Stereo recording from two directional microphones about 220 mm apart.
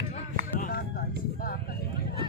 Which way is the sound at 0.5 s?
40° left (ahead or behind).